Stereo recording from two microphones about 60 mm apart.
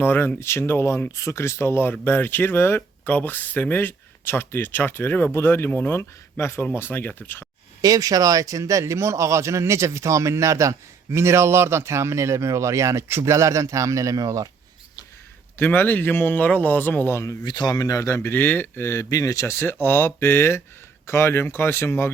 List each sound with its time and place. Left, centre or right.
0.0 s speech: left
0.3 s speech: left
7.8 s speech: right
8.8 s speech: right
15.5 s speech: left
17.7 s speech: left
18.2 s speech: left
18.8 s speech: left